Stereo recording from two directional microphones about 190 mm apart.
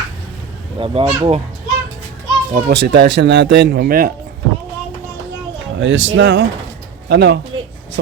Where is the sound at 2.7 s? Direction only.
65° right (ahead or behind).